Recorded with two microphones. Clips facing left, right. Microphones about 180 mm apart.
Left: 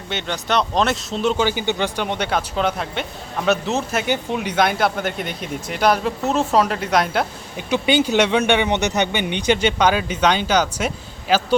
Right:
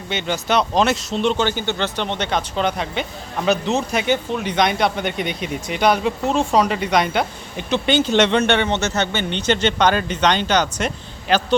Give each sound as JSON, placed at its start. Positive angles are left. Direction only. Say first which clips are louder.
{"t": 0.1, "sound": "speech", "louder": "right 2 dB", "side_deg": 0}